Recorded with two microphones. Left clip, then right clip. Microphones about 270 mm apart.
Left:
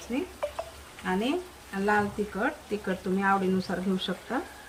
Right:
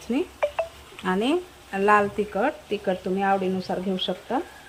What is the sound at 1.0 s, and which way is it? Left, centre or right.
Dishes, centre.